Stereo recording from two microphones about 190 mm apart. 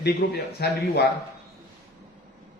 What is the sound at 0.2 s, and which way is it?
Speech, 55° left (ahead or behind).